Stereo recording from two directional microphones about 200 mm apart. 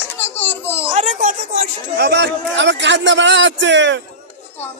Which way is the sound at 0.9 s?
40° right (ahead or behind).